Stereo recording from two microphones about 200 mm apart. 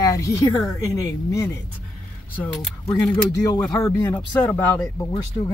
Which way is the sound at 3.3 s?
20° left (ahead or behind).